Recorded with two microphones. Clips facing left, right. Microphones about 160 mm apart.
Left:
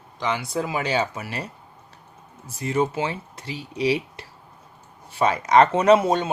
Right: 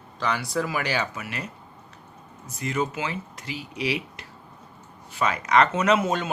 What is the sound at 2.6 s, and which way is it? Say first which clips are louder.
Speech: left 4 dB; 30° left (ahead or behind).